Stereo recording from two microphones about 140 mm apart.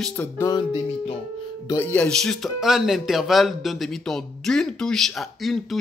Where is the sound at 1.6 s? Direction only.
15° left (ahead or behind).